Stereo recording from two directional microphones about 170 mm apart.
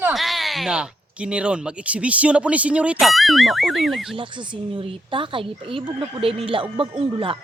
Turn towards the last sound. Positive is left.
turn(degrees=-30)  # may be behind; listen again after turning